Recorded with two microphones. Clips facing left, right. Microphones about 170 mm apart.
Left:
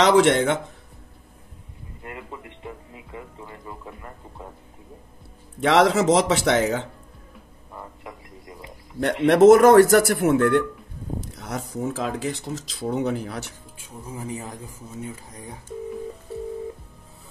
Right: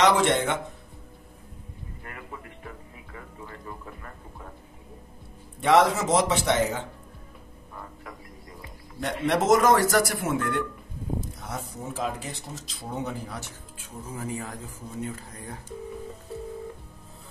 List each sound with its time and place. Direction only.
0.2 s speech: 80° left
2.0 s music: 20° left (ahead or behind)
5.6 s a man's voice: 85° left
9.0 s a man's voice: 60° left (ahead or behind)
11.1 s speech: 75° left (ahead or behind)
13.8 s speech: 15° left (ahead or behind)